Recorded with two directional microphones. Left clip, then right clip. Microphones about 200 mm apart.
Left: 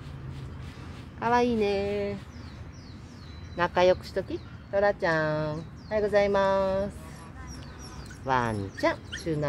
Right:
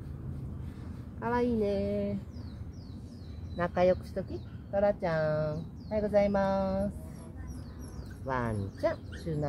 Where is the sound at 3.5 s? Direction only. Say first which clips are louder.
Left 4 dB; 40° left (ahead or behind).